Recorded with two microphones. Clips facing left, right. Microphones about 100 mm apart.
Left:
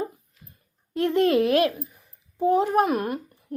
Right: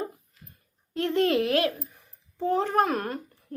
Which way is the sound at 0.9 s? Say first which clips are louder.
Left 3 dB; 20° left (ahead or behind).